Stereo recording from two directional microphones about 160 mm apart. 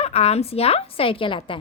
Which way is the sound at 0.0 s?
40° left (ahead or behind).